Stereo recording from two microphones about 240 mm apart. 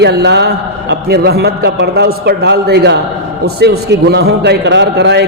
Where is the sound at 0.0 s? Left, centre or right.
Right.